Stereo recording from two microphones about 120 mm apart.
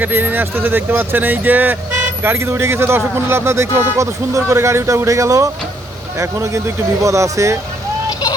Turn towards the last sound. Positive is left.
turn(degrees=-25)  # may be behind; listen again after turning